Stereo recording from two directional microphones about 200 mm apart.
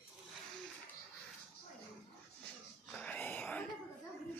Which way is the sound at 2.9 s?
5° left (ahead or behind).